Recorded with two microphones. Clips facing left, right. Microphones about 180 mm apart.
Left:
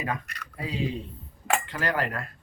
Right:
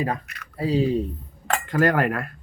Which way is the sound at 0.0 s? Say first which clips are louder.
Right 5 dB; 35° right (ahead or behind).